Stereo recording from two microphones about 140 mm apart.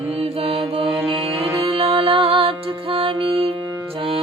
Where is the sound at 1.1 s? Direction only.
40° right (ahead or behind).